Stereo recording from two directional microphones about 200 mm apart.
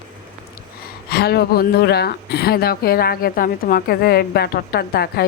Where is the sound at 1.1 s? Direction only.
50° left (ahead or behind).